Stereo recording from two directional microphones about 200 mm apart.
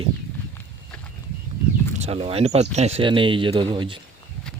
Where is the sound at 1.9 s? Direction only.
30° right (ahead or behind).